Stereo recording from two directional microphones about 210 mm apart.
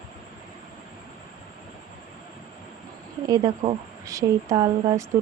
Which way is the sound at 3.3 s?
20° right (ahead or behind).